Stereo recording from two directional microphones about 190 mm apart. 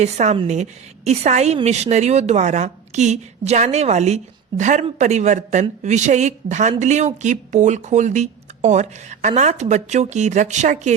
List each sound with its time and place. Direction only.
0.0 s a woman's voice: 35° right (ahead or behind)